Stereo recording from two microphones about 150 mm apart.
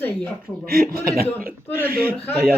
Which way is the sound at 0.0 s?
10° left (ahead or behind).